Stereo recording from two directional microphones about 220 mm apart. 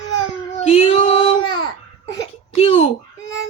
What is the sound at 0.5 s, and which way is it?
Child singing, 30° left (ahead or behind).